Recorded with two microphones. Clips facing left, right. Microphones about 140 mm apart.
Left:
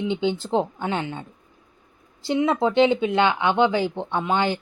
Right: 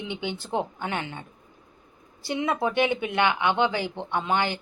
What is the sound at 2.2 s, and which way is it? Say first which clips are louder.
A woman's voice: left 5 dB; 20° left (ahead or behind).